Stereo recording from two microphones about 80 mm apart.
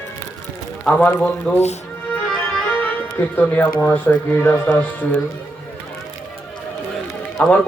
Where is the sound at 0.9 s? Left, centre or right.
Centre.